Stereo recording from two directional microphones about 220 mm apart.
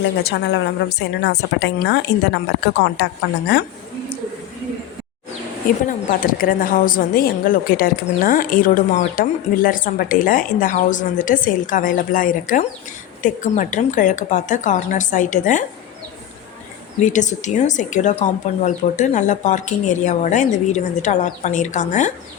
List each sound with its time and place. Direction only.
0.0 s a woman's voice: 50° left (ahead or behind)
5.6 s a woman's voice: 40° left (ahead or behind)
17.1 s a woman's voice: 35° left (ahead or behind)